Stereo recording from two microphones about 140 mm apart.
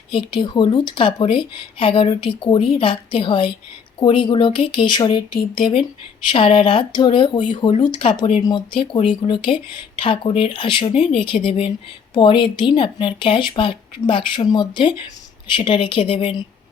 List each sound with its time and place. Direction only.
0.1 s a woman's voice: 35° left (ahead or behind)